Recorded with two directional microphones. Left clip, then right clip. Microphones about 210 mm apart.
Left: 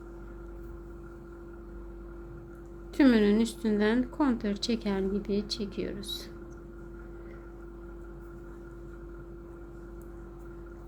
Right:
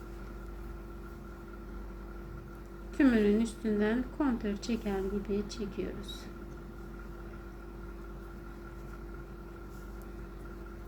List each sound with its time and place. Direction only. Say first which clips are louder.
3.0 s a woman's voice: left 3 dB; 60° left (ahead or behind)